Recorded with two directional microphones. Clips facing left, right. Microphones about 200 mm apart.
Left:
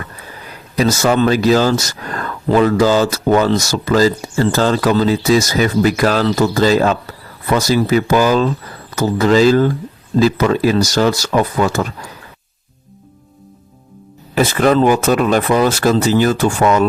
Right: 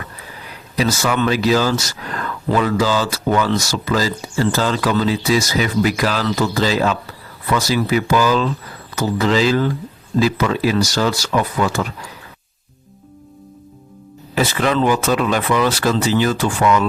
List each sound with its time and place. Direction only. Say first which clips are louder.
0.8 s speech: left 5 dB; 45° left (ahead or behind)
14.3 s speech: left 5 dB; 45° left (ahead or behind)